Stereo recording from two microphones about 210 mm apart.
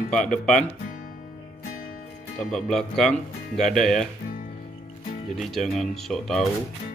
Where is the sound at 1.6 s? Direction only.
45° left (ahead or behind).